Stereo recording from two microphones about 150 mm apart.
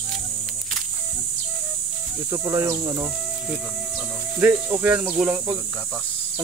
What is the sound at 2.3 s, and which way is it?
Speech, 25° right (ahead or behind).